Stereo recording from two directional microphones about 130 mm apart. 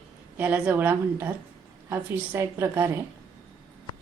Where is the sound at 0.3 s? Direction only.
10° right (ahead or behind).